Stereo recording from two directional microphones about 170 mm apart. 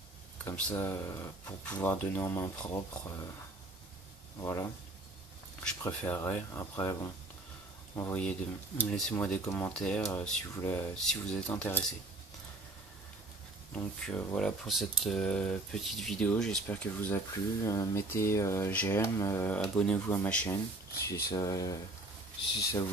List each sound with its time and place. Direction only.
0.5 s speech: 10° left (ahead or behind)
4.4 s speech: 15° left (ahead or behind)
5.8 s speech: 15° left (ahead or behind)
9.8 s speech: 5° left (ahead or behind)
14.0 s speech: 5° left (ahead or behind)
20.4 s speech: 20° left (ahead or behind)